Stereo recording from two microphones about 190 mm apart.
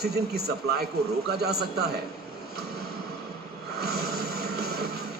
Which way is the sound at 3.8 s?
55° right (ahead or behind).